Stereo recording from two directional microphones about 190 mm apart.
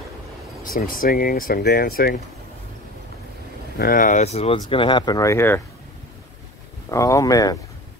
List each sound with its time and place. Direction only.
0.7 s speech: 50° left (ahead or behind)
3.7 s speech: 50° left (ahead or behind); by 5.6 s 15° left (ahead or behind)
6.9 s speech: 15° left (ahead or behind)